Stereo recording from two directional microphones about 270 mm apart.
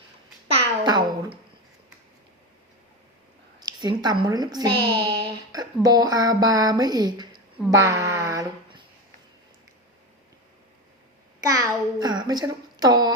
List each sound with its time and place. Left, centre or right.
0.4 s babbling: centre
3.6 s a child's voice: centre
11.3 s a child's voice: centre